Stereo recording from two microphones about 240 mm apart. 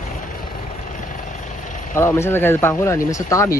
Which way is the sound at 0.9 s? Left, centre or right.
Left.